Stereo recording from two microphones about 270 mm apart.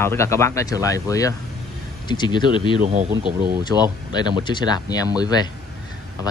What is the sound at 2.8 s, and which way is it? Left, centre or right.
Speech, right.